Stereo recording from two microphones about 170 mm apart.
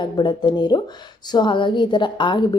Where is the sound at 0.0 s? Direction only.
25° left (ahead or behind).